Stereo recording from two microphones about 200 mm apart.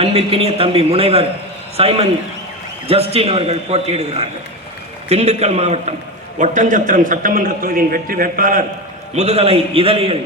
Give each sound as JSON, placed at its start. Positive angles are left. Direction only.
{"t": 0.0, "sound": "a man's voice", "side_deg": -30}
{"t": 9.1, "sound": "a man's voice", "side_deg": -30}